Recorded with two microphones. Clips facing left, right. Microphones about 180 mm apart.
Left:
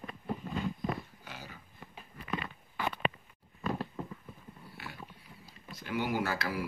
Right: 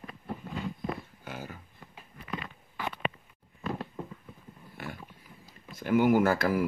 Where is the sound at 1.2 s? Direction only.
50° right (ahead or behind).